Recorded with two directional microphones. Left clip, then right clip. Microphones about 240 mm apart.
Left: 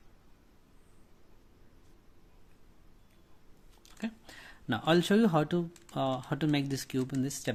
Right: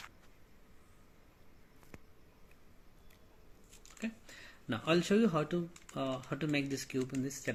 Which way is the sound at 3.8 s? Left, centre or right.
Left.